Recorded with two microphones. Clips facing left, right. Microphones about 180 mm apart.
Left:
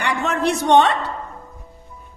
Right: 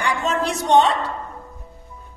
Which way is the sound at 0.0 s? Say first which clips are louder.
Left 1 dB; 65° left (ahead or behind).